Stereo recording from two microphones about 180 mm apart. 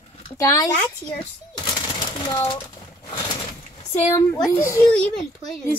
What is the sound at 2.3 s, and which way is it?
Speech, 30° left (ahead or behind).